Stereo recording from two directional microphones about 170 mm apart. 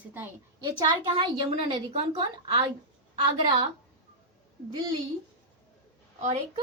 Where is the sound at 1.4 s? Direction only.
30° right (ahead or behind).